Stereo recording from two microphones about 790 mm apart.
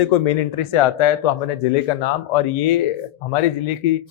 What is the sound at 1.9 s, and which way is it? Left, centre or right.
Speech, left.